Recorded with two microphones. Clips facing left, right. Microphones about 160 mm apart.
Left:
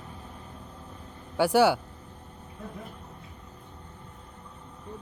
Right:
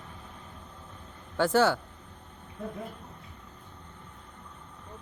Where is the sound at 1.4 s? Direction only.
10° left (ahead or behind).